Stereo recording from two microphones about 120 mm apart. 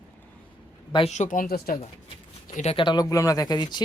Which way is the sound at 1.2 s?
70° left (ahead or behind).